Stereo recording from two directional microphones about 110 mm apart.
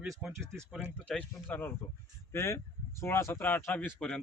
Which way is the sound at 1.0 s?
15° left (ahead or behind).